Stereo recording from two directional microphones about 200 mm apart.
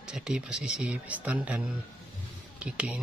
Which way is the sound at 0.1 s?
5° right (ahead or behind).